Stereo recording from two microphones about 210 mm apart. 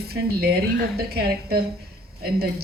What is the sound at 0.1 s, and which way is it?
Speech, 50° right (ahead or behind).